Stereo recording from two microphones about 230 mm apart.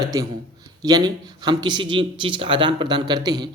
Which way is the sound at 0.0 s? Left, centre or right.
Centre.